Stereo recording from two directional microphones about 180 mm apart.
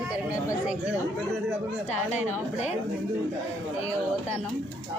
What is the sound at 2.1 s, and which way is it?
Speech, 40° left (ahead or behind).